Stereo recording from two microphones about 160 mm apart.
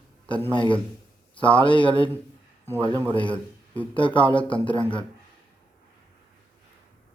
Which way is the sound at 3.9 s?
30° left (ahead or behind).